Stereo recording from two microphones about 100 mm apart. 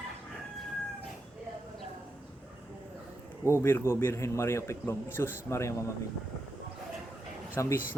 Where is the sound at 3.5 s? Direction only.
25° left (ahead or behind).